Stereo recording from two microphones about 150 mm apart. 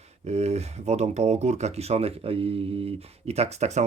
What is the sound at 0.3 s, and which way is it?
Speech, 45° right (ahead or behind).